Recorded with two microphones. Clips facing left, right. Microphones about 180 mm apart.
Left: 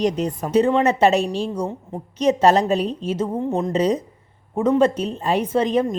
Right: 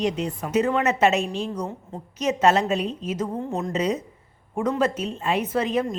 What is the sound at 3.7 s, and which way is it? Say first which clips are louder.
Speech: left 5 dB; 35° left (ahead or behind).